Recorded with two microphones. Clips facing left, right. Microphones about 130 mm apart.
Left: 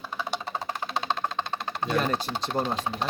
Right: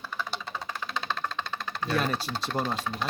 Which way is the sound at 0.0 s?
20° left (ahead or behind).